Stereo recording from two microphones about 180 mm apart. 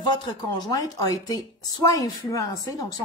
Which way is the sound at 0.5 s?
20° left (ahead or behind).